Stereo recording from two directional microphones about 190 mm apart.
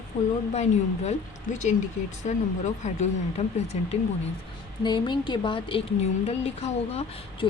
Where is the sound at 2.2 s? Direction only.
40° left (ahead or behind).